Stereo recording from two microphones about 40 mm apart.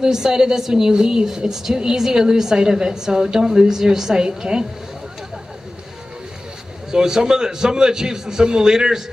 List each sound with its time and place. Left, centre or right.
0.0 s a woman's voice: centre
6.9 s a woman's voice: centre